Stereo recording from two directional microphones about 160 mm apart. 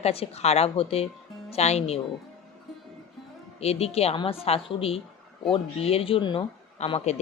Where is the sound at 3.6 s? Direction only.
40° left (ahead or behind).